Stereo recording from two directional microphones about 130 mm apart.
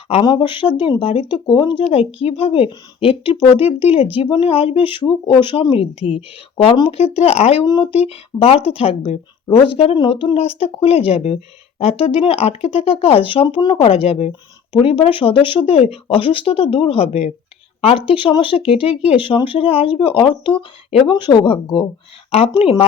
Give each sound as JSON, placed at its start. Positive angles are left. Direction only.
{"t": 0.1, "sound": "speech", "side_deg": 40}
{"t": 1.8, "sound": "speech", "side_deg": 55}
{"t": 7.6, "sound": "speech", "side_deg": 35}